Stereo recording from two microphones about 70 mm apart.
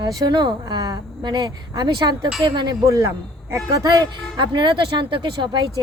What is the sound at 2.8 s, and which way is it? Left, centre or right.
A man's voice, right.